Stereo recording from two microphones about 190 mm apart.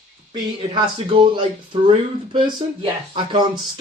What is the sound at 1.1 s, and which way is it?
Speech, 25° right (ahead or behind).